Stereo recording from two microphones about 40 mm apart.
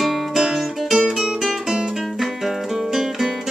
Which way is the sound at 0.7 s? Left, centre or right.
Centre.